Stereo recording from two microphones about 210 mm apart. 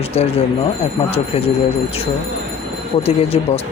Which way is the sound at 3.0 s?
30° left (ahead or behind).